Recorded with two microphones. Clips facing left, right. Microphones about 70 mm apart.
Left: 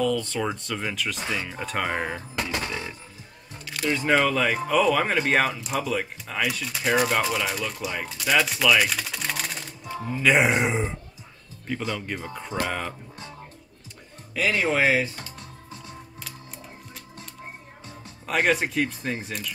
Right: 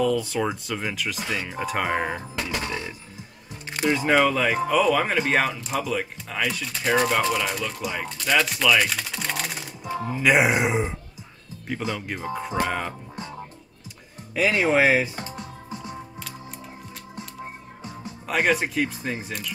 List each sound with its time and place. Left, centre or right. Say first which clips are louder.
0.0 s speech: right 2 dB; centre
2.6 s speech: right 1 dB; centre
3.6 s music: right 4 dB; right
3.9 s speech: right 1 dB; centre
14.3 s speech: right 3 dB; centre
15.1 s music: right 6 dB; right
15.7 s music: right 7 dB; centre
17.8 s speech: right 3 dB; centre